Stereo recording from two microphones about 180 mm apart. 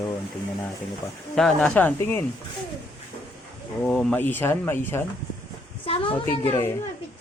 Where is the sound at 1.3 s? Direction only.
Centre (ahead or behind).